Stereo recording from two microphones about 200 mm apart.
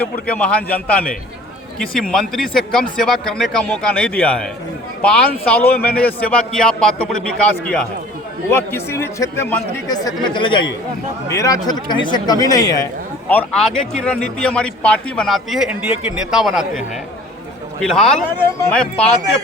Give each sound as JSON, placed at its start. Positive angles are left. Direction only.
{"t": 0.0, "sound": "speech", "side_deg": 5}
{"t": 1.8, "sound": "speech", "side_deg": 0}
{"t": 13.2, "sound": "speech", "side_deg": 5}